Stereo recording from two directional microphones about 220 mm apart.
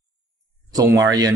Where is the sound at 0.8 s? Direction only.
15° right (ahead or behind).